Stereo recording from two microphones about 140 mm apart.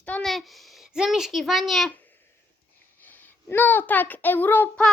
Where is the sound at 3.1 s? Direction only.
15° left (ahead or behind).